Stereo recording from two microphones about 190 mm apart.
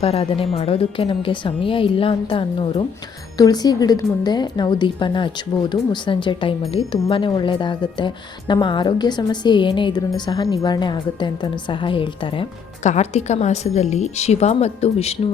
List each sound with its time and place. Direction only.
0.0 s a woman's voice: 30° left (ahead or behind)